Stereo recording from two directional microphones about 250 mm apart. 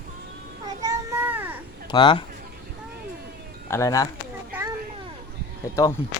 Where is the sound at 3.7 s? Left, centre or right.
Centre.